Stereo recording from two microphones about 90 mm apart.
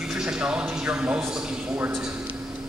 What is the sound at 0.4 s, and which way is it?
Speech, 10° right (ahead or behind).